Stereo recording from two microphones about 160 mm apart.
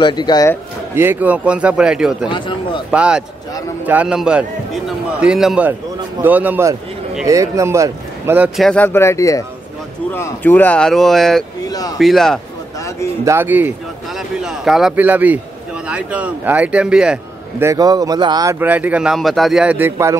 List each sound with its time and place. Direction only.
0.0 s speech: 25° left (ahead or behind)
0.9 s speech: 10° right (ahead or behind)
2.2 s speech: 30° left (ahead or behind)
2.9 s speech: 5° right (ahead or behind)
8.5 s speech: 5° left (ahead or behind)
13.2 s a man's voice: 15° right (ahead or behind)
17.6 s speech: 20° right (ahead or behind)